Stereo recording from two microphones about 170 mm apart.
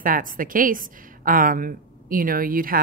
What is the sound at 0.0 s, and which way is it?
A woman's voice, 55° right (ahead or behind).